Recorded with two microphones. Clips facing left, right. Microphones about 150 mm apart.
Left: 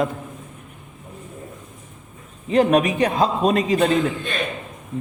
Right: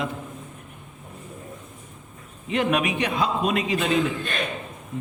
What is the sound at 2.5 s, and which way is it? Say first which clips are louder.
A man's voice: left 6 dB; 35° left (ahead or behind).